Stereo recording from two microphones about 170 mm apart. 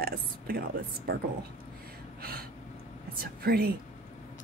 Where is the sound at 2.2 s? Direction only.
65° right (ahead or behind).